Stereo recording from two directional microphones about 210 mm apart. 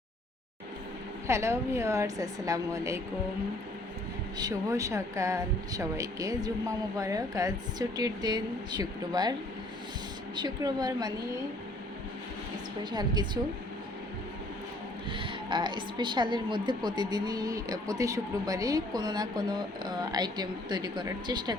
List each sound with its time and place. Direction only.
1.3 s speech: 15° right (ahead or behind)
4.4 s speech: 15° right (ahead or behind)
10.3 s a woman's voice: 20° right (ahead or behind)
12.8 s a woman's voice: 20° right (ahead or behind)
15.1 s a woman's voice: 25° right (ahead or behind)